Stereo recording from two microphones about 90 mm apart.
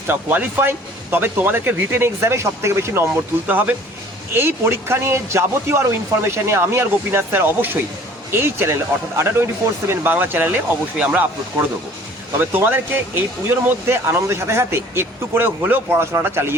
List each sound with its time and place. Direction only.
0.1 s speech: 20° right (ahead or behind)
3.4 s speech: 15° right (ahead or behind)
12.4 s speech: 20° right (ahead or behind)